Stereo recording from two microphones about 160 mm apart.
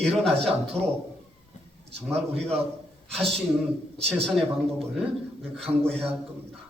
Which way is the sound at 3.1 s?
5° left (ahead or behind).